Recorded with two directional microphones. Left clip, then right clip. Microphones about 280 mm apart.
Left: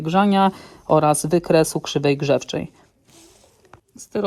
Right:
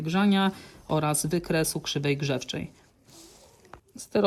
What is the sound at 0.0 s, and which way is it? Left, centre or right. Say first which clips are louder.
Speech: left 9 dB; centre.